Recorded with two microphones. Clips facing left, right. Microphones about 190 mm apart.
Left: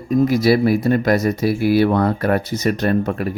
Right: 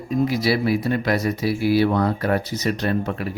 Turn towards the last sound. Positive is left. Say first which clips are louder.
# left 5 dB
turn(degrees=50)  # may be behind; listen again after turning